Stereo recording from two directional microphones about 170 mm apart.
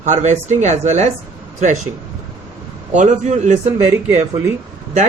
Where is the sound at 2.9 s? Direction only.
45° right (ahead or behind).